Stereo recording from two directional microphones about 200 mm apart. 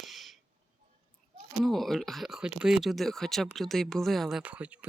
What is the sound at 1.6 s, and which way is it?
Speech, centre (ahead or behind).